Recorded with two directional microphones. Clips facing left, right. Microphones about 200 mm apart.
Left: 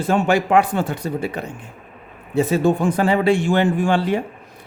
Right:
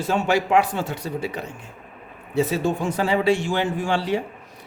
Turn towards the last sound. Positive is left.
turn(degrees=55)  # may be behind; listen again after turning